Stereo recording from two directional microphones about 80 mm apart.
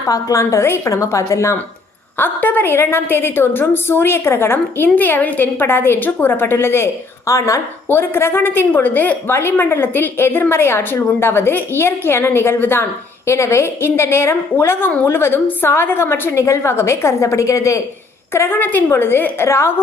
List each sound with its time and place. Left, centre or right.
0.1 s a woman's voice: left
2.1 s a woman's voice: left
7.9 s a woman's voice: left
18.3 s a woman's voice: left